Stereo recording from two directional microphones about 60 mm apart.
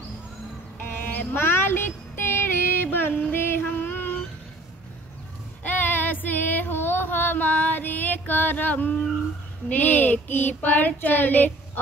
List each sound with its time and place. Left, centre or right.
1.1 s child singing: left
3.2 s music: left
3.8 s a sound: left
5.6 s music: left
9.7 s child singing: left